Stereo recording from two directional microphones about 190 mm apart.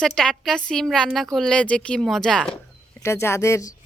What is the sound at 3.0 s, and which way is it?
Speech, 15° left (ahead or behind).